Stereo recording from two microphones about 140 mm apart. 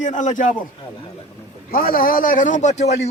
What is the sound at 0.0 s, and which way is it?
Speech, 60° left (ahead or behind).